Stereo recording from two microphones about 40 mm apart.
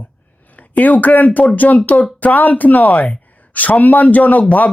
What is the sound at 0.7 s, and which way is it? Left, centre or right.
Speech, left.